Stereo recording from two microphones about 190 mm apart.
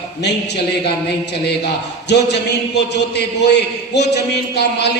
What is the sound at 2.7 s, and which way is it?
A man's voice, 60° left (ahead or behind).